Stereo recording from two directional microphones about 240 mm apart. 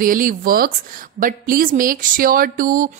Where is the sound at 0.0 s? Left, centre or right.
Right.